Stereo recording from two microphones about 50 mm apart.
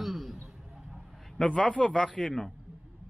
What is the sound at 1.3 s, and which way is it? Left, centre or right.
Speech, centre.